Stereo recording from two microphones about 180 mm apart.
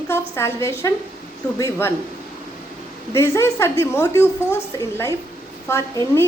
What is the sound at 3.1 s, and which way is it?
A woman's voice, 15° left (ahead or behind).